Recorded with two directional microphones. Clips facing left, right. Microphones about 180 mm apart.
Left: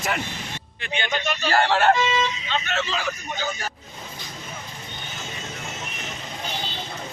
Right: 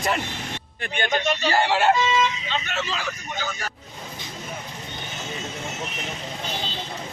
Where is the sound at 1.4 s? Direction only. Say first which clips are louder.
Left 2 dB; 15° right (ahead or behind).